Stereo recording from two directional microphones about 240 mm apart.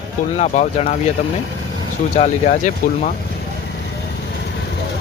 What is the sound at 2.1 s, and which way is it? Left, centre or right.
Speech, left.